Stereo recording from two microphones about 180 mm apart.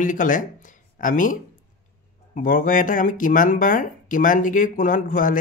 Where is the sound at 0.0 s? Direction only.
45° left (ahead or behind).